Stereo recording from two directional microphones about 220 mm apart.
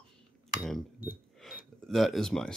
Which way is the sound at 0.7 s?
5° right (ahead or behind).